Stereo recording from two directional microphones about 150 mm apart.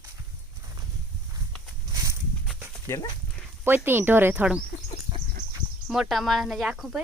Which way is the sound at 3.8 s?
15° right (ahead or behind).